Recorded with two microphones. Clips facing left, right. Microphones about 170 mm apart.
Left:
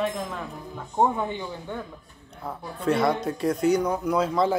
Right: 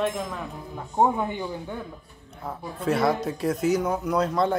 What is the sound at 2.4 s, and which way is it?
Speech, centre (ahead or behind).